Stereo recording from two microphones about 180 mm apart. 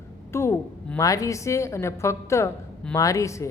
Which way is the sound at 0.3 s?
15° left (ahead or behind).